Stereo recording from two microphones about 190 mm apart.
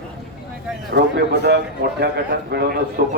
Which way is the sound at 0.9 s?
60° right (ahead or behind).